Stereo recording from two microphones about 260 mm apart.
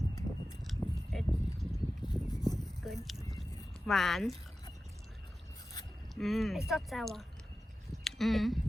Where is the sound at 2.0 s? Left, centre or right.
Centre.